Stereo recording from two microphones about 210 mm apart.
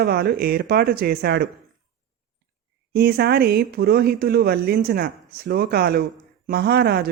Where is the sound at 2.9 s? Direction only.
50° right (ahead or behind).